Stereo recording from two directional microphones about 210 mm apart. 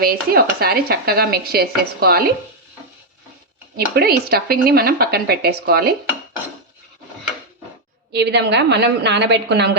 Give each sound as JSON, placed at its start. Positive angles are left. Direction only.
{"t": 0.0, "sound": "speech", "side_deg": -45}
{"t": 3.8, "sound": "speech", "side_deg": -50}
{"t": 8.1, "sound": "a woman's voice", "side_deg": -50}